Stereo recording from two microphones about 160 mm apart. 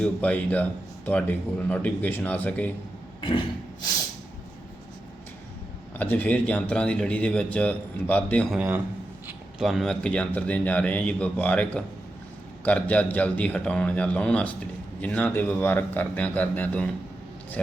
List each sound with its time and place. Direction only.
0.0 s a man's voice: 10° left (ahead or behind)
3.2 s a sound: 30° left (ahead or behind)
6.0 s a man's voice: 10° left (ahead or behind)
8.5 s a man's voice: 10° right (ahead or behind); by 16.9 s 10° left (ahead or behind)